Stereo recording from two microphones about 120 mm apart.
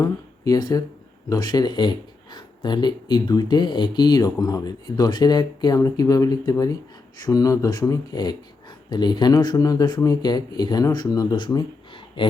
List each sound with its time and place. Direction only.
0.0 s speech: 30° left (ahead or behind)